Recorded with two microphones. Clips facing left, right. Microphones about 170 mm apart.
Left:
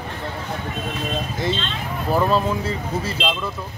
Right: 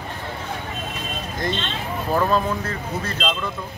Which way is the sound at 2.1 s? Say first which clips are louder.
Left 1 dB; 10° left (ahead or behind).